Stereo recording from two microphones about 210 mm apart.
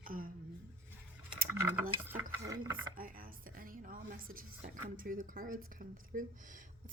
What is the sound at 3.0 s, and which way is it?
A woman's voice, 45° right (ahead or behind).